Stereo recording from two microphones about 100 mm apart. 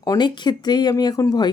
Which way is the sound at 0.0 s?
45° left (ahead or behind).